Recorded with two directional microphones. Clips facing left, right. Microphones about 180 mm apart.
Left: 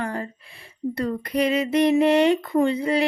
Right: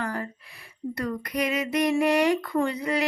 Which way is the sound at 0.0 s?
25° left (ahead or behind).